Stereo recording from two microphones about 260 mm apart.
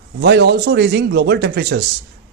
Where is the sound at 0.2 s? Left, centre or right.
Right.